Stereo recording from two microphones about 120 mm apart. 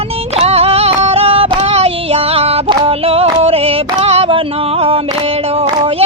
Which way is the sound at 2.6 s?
50° right (ahead or behind).